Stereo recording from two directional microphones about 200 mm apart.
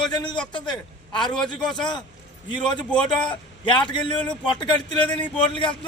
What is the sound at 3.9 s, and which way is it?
Speech, 20° left (ahead or behind).